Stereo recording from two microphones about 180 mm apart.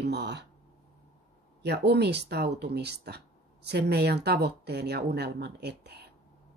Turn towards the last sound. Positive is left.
turn(degrees=-65)  # may be behind; listen again after turning